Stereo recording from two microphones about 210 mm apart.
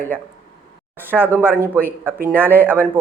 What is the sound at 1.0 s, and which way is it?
Speech, 10° right (ahead or behind).